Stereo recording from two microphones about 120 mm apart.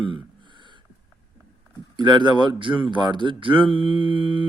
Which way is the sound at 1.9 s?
40° right (ahead or behind).